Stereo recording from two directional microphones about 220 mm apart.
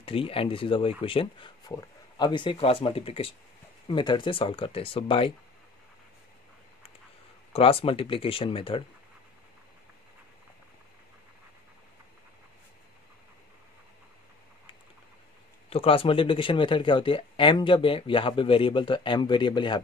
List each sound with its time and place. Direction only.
0.0 s speech: 25° left (ahead or behind)
7.5 s speech: 25° left (ahead or behind)
15.7 s speech: 25° left (ahead or behind)